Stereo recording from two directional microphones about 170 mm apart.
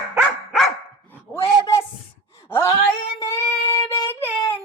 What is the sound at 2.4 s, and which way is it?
Wail, 15° left (ahead or behind).